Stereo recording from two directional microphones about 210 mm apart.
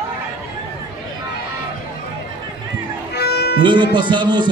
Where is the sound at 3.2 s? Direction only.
50° left (ahead or behind).